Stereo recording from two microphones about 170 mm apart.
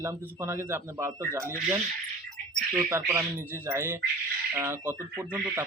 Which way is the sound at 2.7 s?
10° right (ahead or behind).